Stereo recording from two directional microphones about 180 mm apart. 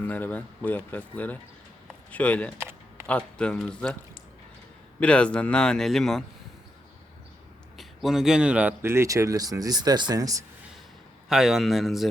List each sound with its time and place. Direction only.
0.0 s speech: 10° left (ahead or behind)
2.6 s a sound: 15° right (ahead or behind)
3.1 s a man's voice: 5° left (ahead or behind)
4.9 s a man's voice: 5° left (ahead or behind)
7.8 s speech: centre (ahead or behind); by 10.4 s 20° right (ahead or behind)
11.3 s a man's voice: 5° right (ahead or behind)